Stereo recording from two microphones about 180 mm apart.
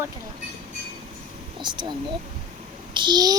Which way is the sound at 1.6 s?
25° right (ahead or behind).